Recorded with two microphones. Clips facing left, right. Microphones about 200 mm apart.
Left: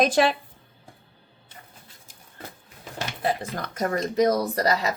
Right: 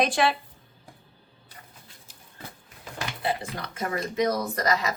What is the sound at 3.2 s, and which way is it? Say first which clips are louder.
Speech: left 3 dB; 45° left (ahead or behind).